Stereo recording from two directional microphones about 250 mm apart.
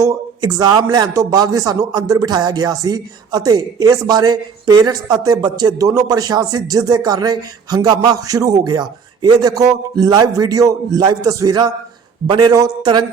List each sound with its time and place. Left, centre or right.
0.0 s speech: centre